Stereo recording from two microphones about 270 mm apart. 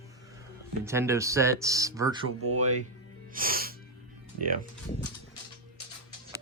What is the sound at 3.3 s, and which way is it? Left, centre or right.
Music, right.